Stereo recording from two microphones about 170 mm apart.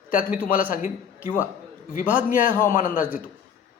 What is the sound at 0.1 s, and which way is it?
Speech, 55° left (ahead or behind).